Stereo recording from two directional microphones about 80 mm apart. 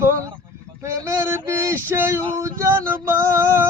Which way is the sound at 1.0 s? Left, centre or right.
Right.